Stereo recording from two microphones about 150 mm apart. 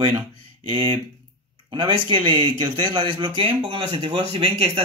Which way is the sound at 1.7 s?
35° right (ahead or behind).